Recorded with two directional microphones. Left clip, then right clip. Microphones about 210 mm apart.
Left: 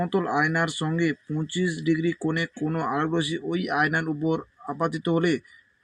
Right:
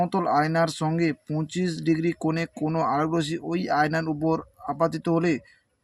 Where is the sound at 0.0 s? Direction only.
20° right (ahead or behind).